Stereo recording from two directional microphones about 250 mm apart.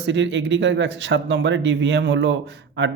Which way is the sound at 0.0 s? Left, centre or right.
Right.